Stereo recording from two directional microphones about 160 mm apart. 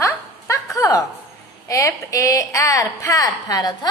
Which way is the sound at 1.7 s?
20° left (ahead or behind).